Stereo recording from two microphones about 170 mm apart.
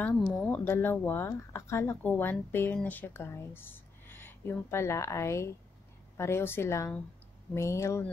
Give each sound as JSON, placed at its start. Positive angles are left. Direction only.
{"t": 0.0, "sound": "speech", "side_deg": 5}